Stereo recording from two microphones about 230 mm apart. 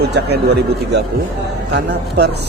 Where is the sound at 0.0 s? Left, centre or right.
Right.